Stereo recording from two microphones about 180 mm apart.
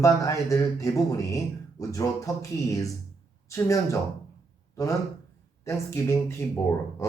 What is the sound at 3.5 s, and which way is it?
Speech, 15° left (ahead or behind).